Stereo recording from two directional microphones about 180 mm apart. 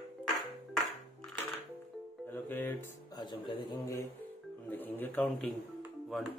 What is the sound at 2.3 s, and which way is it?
Music, 10° left (ahead or behind).